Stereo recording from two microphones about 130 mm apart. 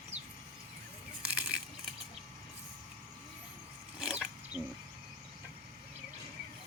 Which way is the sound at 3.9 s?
5° right (ahead or behind).